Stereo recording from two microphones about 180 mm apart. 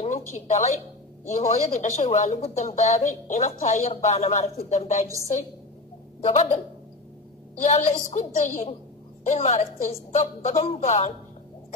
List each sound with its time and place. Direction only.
0.0 s a woman's voice: 40° left (ahead or behind)
6.2 s a woman's voice: 40° left (ahead or behind)
7.6 s a woman's voice: 40° left (ahead or behind)